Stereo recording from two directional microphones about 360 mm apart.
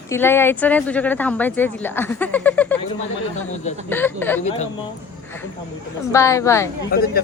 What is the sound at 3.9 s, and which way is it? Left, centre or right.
Speech, centre.